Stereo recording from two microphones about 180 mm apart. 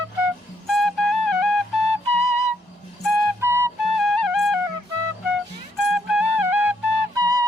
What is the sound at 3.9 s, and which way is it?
Music, centre (ahead or behind).